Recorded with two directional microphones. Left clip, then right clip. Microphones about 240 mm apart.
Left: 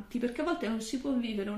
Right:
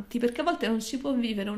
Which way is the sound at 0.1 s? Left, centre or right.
Right.